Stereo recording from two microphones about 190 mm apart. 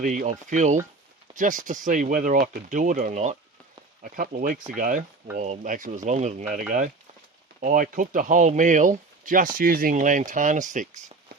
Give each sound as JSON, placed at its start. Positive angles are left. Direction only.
{"t": 0.0, "sound": "speech", "side_deg": -45}